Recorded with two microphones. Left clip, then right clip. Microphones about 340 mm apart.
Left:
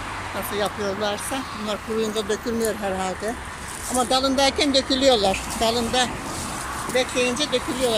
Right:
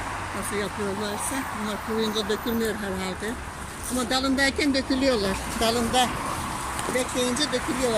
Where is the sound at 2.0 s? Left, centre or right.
Left.